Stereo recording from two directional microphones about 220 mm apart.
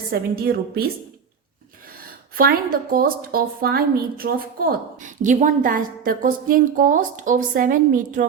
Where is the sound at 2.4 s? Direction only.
40° right (ahead or behind).